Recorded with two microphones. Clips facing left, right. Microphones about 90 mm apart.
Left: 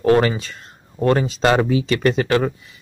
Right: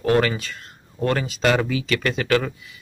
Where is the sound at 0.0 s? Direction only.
25° left (ahead or behind).